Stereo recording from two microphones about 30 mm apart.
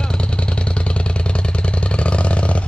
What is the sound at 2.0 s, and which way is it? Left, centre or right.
Vehicle, left.